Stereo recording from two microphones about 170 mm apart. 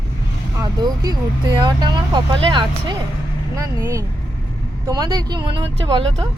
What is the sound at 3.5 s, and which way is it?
Speech, 15° right (ahead or behind).